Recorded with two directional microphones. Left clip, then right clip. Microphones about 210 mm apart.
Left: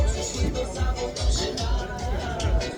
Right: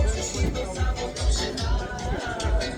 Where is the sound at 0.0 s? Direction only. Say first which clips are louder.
Even; 50° left (ahead or behind).